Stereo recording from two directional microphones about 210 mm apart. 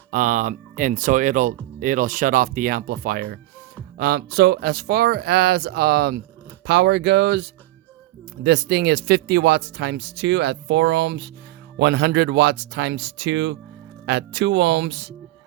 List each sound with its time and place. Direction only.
0.1 s speech: 40° right (ahead or behind); by 15.1 s 55° right (ahead or behind)